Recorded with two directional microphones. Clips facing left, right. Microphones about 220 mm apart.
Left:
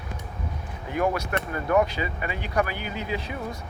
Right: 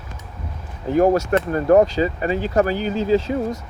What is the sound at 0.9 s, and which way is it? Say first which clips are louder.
Speech: right 10 dB; 40° right (ahead or behind).